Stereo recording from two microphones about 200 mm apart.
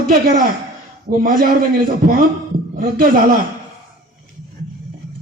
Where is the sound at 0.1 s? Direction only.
45° right (ahead or behind).